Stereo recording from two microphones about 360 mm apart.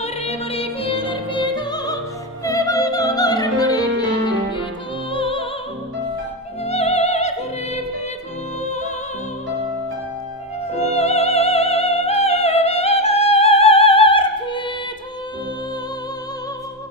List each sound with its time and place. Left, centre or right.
0.0 s music: centre
2.4 s opera: centre
5.1 s music: centre
6.6 s music: centre
10.7 s music: centre